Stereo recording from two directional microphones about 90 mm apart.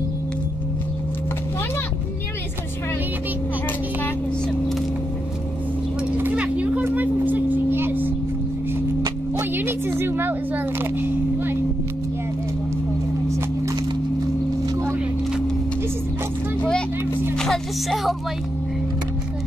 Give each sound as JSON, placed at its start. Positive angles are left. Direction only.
{"t": 6.1, "sound": "vehicle", "side_deg": -15}
{"t": 9.4, "sound": "a sound", "side_deg": -25}
{"t": 17.4, "sound": "music", "side_deg": 0}